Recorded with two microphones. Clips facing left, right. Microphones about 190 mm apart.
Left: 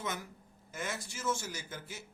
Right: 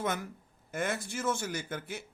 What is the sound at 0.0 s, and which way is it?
A man's voice, 55° right (ahead or behind).